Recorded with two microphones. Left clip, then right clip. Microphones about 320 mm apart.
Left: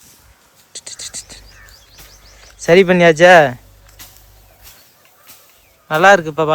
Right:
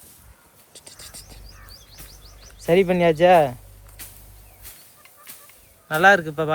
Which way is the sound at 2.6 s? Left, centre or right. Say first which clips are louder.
Left 8 dB; left.